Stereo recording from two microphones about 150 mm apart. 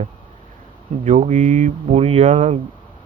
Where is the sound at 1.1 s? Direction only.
50° right (ahead or behind).